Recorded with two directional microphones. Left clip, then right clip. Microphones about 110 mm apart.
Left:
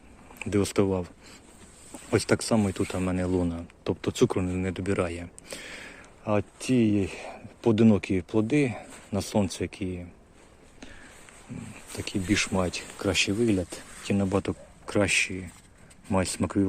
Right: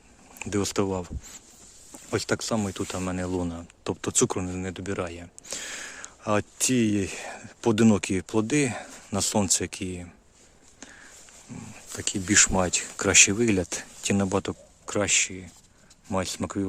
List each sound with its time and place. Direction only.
0.3 s speech: 30° right (ahead or behind)
2.0 s speech: 5° right (ahead or behind); by 4.7 s 25° right (ahead or behind)
4.7 s speech: 10° right (ahead or behind)
5.5 s a sound: 45° right (ahead or behind)
6.3 s speech: 70° right (ahead or behind)
11.5 s speech: 40° right (ahead or behind); by 14.3 s 65° right (ahead or behind)
14.3 s speech: 35° right (ahead or behind)
14.8 s speech: 20° right (ahead or behind)